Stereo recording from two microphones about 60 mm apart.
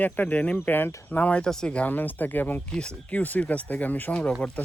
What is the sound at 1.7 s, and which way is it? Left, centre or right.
Speech, left.